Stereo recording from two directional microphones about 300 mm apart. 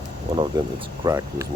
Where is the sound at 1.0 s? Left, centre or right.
Centre.